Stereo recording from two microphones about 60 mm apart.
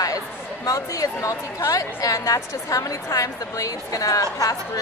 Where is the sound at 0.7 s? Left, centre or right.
Left.